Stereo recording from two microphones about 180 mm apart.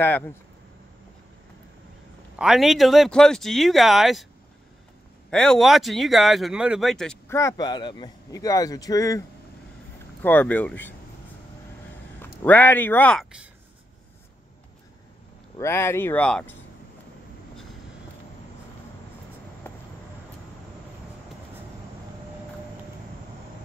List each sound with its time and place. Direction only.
0.0 s speech: 10° left (ahead or behind)
2.3 s speech: 5° right (ahead or behind)
5.3 s speech: 5° left (ahead or behind)
7.2 s a man's voice: 15° left (ahead or behind)
10.2 s speech: 10° left (ahead or behind)
12.4 s speech: 10° left (ahead or behind)
15.5 s speech: 15° left (ahead or behind)